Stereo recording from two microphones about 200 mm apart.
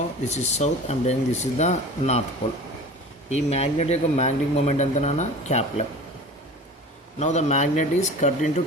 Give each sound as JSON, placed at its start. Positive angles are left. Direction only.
{"t": 0.3, "sound": "a man's voice", "side_deg": 35}
{"t": 3.2, "sound": "a man's voice", "side_deg": 35}
{"t": 7.2, "sound": "a man's voice", "side_deg": 35}